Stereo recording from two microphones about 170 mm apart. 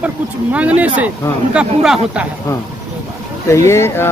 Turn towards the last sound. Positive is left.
turn(degrees=15)  # may be behind; listen again after turning